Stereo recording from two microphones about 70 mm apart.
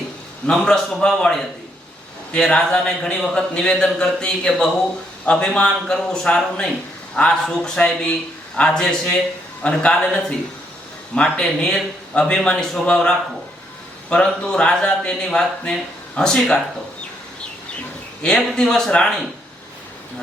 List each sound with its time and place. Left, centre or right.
0.4 s speech: centre
18.2 s speech: centre